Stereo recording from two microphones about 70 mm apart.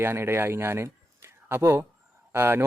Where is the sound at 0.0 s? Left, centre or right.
Right.